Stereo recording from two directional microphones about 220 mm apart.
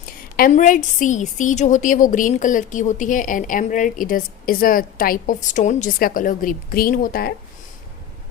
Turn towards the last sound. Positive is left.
turn(degrees=45)  # may be behind; listen again after turning